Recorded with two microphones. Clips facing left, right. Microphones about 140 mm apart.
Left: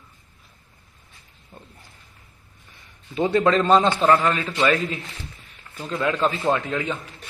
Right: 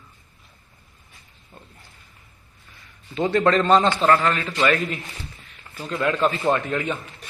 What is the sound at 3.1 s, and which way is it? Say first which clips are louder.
A man's voice: even; 10° left (ahead or behind).